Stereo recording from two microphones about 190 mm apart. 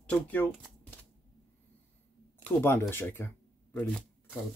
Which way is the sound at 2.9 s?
10° left (ahead or behind).